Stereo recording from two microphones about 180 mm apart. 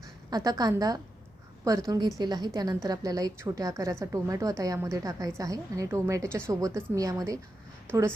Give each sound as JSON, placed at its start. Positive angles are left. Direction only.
{"t": 0.3, "sound": "a woman's voice", "side_deg": -20}